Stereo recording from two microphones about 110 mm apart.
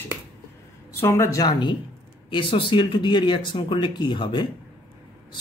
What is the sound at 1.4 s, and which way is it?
Speech, 40° left (ahead or behind).